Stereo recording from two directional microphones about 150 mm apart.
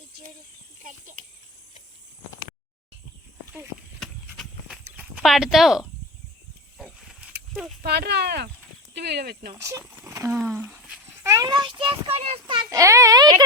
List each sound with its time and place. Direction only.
0.8 s a child's voice: 55° right (ahead or behind)
4.0 s horse: centre (ahead or behind)
4.9 s speech: 5° right (ahead or behind)
6.7 s a sound: centre (ahead or behind)
7.5 s speech: centre (ahead or behind)
7.8 s speech: 90° right
9.5 s speech: 20° right (ahead or behind)
10.3 s a sound: 10° right (ahead or behind)
11.2 s a child's voice: 20° right (ahead or behind)
12.7 s speech: 20° right (ahead or behind)